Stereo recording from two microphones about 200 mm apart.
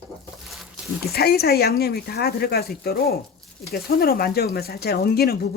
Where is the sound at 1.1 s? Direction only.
50° left (ahead or behind).